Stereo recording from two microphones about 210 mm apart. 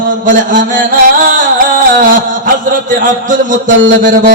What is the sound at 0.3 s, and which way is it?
Music, 40° right (ahead or behind).